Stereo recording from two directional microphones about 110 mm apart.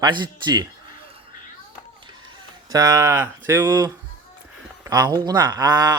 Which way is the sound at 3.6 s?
35° right (ahead or behind).